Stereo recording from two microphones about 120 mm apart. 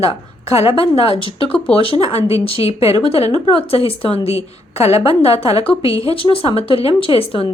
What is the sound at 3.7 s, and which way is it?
A woman's voice, 50° left (ahead or behind).